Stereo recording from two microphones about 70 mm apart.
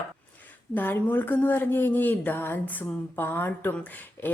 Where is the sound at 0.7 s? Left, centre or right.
Left.